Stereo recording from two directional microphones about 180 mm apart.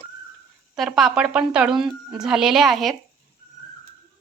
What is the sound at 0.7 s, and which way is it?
Speech, centre (ahead or behind).